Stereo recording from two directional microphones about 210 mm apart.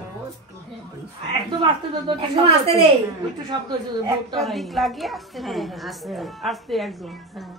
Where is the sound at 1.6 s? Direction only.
25° right (ahead or behind).